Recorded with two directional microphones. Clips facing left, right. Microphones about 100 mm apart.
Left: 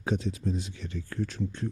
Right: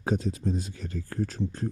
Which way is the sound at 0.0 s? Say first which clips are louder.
Right 2 dB; 40° right (ahead or behind).